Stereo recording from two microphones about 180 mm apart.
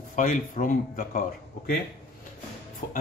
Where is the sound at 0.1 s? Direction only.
50° left (ahead or behind).